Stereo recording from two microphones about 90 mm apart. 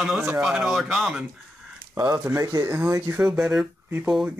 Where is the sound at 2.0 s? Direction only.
35° right (ahead or behind).